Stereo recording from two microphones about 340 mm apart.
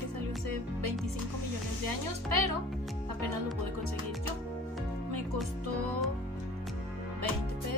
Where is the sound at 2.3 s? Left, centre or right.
Right.